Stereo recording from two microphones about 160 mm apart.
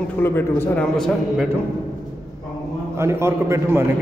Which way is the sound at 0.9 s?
Centre (ahead or behind).